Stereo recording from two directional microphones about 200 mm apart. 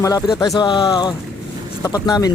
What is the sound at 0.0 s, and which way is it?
A man's voice, 15° left (ahead or behind).